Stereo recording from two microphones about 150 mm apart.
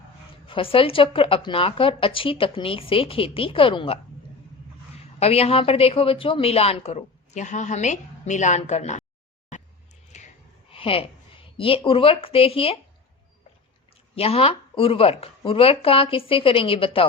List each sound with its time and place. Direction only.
0.4 s speech: 35° left (ahead or behind)
5.2 s a woman's voice: 40° left (ahead or behind)
10.1 s a sound: 50° left (ahead or behind)
14.2 s speech: 40° left (ahead or behind)